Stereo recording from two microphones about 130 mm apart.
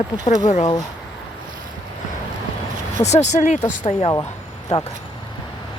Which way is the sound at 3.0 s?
60° left (ahead or behind).